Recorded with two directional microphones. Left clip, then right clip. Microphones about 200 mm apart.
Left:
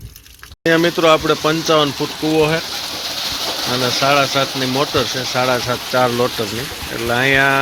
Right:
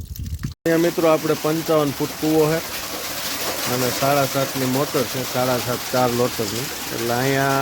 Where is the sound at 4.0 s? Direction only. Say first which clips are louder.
Left 5 dB; 5° left (ahead or behind).